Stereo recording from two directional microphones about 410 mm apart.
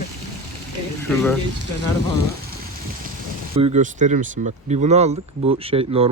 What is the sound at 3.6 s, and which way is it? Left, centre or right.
Speech, centre.